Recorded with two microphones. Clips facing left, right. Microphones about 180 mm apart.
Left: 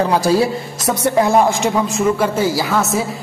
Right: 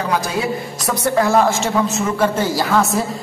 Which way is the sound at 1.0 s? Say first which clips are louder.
Left 1 dB; 20° left (ahead or behind).